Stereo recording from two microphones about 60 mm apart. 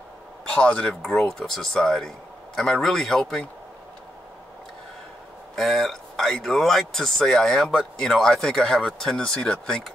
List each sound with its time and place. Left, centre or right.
0.5 s speech: centre
5.6 s speech: centre